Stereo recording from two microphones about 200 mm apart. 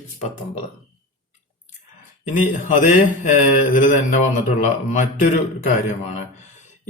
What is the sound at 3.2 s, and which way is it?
Speech, 40° left (ahead or behind).